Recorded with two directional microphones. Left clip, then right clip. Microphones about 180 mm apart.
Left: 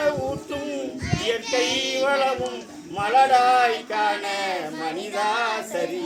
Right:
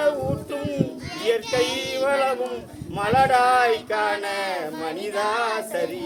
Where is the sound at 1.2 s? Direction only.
20° right (ahead or behind).